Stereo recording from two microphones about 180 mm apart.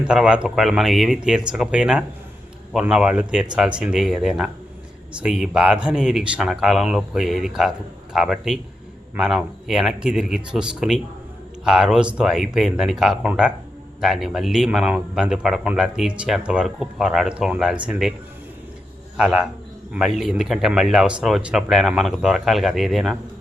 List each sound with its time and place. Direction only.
0.0 s speech: 5° right (ahead or behind)
19.1 s speech: 5° right (ahead or behind)